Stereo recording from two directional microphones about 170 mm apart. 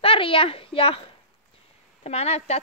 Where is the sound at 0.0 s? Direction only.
30° left (ahead or behind).